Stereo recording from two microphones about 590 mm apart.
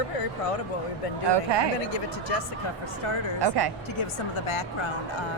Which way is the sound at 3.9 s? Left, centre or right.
Left.